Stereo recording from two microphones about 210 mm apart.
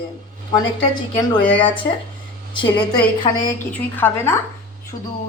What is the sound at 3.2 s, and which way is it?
Speech, 20° left (ahead or behind).